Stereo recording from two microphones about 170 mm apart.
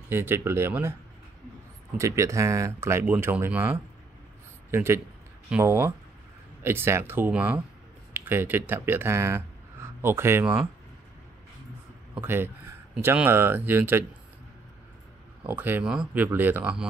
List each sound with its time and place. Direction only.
0.1 s speech: 15° right (ahead or behind)
2.0 s speech: 15° right (ahead or behind)
4.6 s a man's voice: 15° right (ahead or behind)
12.2 s speech: 15° right (ahead or behind)
15.4 s speech: 10° right (ahead or behind)